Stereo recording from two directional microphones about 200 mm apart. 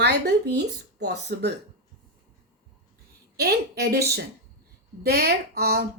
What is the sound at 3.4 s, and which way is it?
A woman's voice, 50° right (ahead or behind).